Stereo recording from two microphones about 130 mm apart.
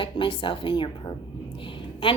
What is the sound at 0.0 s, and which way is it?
A woman's voice, 40° left (ahead or behind).